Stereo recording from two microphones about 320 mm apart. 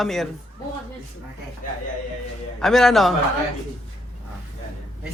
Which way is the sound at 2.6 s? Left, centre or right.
Centre.